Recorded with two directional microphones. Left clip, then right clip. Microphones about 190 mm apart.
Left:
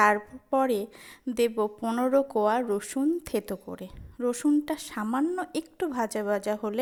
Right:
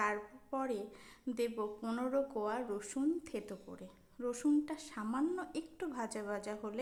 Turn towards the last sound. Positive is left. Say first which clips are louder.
# left 13 dB
turn(degrees=35)  # may be behind; listen again after turning